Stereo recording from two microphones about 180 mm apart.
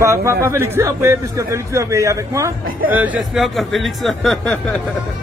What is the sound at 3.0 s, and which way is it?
Speech, 5° right (ahead or behind).